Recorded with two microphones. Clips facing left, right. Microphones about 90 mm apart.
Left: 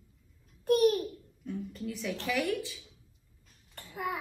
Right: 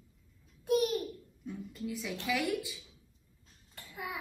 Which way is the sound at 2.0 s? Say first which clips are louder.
Left 2 dB; 10° right (ahead or behind).